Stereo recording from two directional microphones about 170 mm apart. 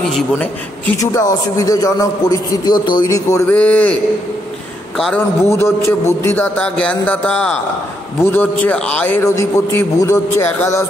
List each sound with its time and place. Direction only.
0.0 s a man's voice: 5° left (ahead or behind)
1.6 s a man's voice: 20° left (ahead or behind)
4.9 s a man's voice: centre (ahead or behind)
5.4 s a man's voice: 15° left (ahead or behind)